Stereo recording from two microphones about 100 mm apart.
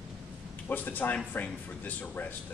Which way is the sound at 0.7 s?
15° left (ahead or behind).